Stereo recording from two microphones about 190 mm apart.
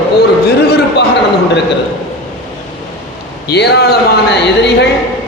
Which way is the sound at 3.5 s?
60° left (ahead or behind).